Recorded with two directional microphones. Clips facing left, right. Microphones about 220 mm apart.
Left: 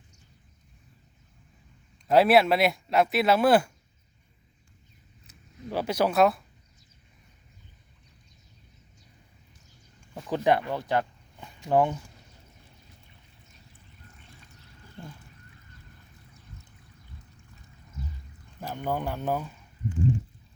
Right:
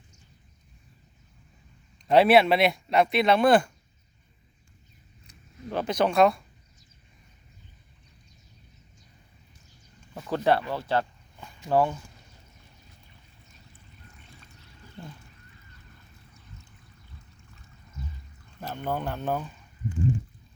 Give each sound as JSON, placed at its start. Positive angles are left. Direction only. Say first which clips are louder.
{"t": 2.0, "sound": "speech", "louder": "right 1 dB", "side_deg": 0}
{"t": 5.2, "sound": "a sound", "louder": "even", "side_deg": 5}
{"t": 10.2, "sound": "speech", "louder": "even", "side_deg": 15}
{"t": 18.6, "sound": "speech", "louder": "even", "side_deg": 10}